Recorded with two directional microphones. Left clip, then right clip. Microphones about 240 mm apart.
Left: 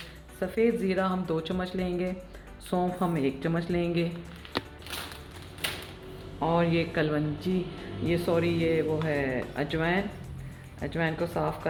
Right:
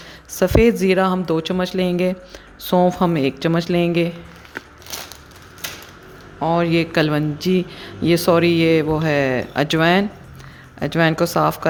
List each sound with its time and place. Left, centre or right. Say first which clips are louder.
0.3 s speech: right 11 dB; right
6.4 s speech: right 8 dB; right
7.3 s speech: right 12 dB; right
8.0 s speech: right 12 dB; right